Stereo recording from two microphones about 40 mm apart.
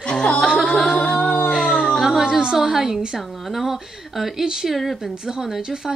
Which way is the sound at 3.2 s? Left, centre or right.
Centre.